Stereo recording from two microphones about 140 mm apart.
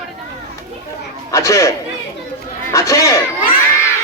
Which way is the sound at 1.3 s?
20° left (ahead or behind).